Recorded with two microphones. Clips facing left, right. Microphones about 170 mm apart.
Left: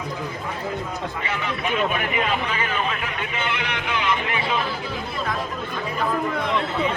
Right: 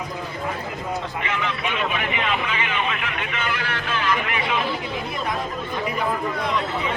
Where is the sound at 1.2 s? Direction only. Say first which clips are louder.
Even; 40° left (ahead or behind).